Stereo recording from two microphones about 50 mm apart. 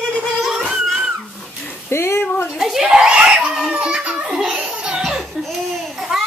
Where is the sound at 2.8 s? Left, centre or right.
Centre.